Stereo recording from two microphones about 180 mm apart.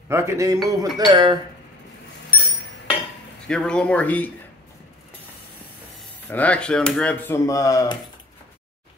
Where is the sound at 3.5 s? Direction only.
5° left (ahead or behind).